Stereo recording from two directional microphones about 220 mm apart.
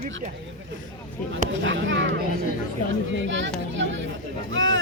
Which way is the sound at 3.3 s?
55° right (ahead or behind).